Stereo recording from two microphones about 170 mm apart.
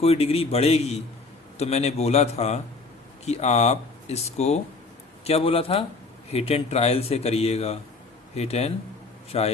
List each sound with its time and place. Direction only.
0.0 s speech: 35° left (ahead or behind)